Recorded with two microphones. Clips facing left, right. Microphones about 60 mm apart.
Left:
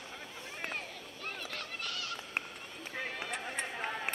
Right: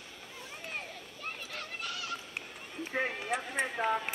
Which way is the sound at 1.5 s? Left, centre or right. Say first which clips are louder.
Right 1 dB; centre.